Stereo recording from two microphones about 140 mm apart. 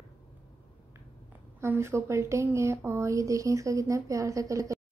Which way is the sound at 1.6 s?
20° right (ahead or behind).